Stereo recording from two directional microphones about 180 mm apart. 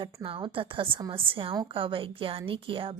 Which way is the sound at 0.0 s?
30° right (ahead or behind).